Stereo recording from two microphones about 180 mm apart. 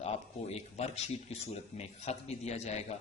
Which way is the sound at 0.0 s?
35° left (ahead or behind).